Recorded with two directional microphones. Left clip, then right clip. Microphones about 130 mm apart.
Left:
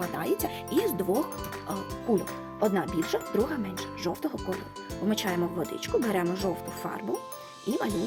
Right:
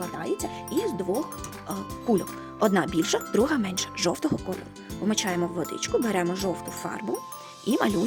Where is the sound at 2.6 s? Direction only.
55° right (ahead or behind); by 4.1 s 90° right.